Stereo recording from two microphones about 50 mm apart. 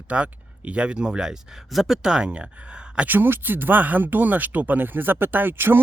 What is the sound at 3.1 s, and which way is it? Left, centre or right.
Speech, right.